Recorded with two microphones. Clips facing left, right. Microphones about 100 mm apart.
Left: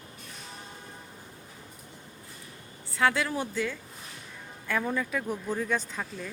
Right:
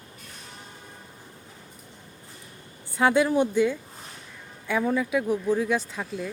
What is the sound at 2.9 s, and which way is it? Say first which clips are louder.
Speech: right 6 dB; 25° right (ahead or behind).